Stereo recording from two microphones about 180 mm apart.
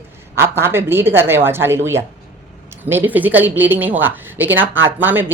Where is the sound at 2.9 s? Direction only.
10° right (ahead or behind).